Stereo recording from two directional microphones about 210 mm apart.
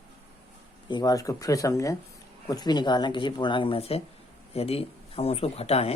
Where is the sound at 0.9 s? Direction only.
20° left (ahead or behind).